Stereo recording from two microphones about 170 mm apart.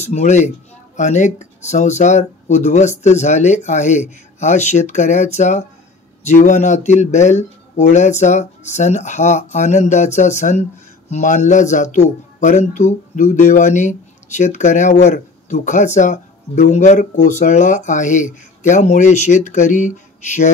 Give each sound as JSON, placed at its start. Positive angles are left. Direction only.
{"t": 0.0, "sound": "speech", "side_deg": 40}